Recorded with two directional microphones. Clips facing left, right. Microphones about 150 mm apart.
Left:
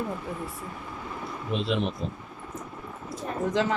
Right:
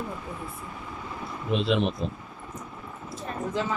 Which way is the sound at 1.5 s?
85° right.